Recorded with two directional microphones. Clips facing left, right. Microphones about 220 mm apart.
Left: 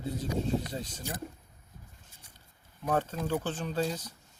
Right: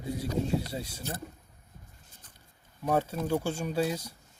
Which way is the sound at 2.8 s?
10° right (ahead or behind).